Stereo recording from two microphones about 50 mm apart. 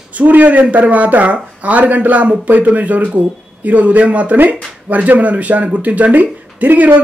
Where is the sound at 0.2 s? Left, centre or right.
Right.